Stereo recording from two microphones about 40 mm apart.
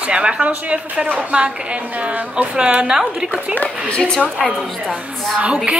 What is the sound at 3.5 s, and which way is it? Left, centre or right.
Speech, left.